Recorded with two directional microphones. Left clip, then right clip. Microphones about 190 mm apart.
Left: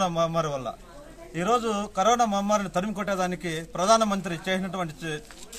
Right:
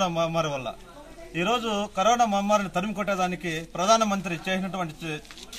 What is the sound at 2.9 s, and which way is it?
A man's voice, 10° left (ahead or behind).